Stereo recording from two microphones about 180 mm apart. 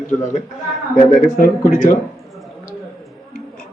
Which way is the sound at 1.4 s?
50° left (ahead or behind).